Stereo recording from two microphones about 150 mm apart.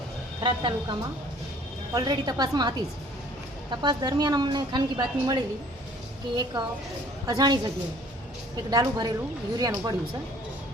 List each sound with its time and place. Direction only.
0.4 s a woman's voice: 30° right (ahead or behind)
8.7 s a woman's voice: 25° right (ahead or behind)